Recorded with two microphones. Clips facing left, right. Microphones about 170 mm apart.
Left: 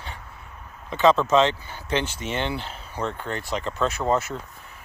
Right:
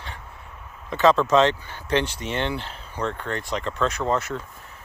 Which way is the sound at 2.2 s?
30° right (ahead or behind).